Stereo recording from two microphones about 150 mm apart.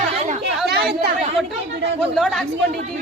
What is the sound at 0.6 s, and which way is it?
Speech, 90° right.